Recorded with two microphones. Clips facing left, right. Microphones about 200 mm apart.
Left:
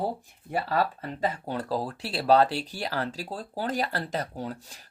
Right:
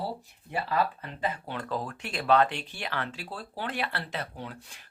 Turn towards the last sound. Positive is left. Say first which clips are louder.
# left 6 dB
turn(degrees=40)  # may be behind; listen again after turning